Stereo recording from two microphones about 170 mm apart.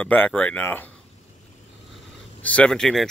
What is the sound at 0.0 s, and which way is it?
Speech, 10° left (ahead or behind).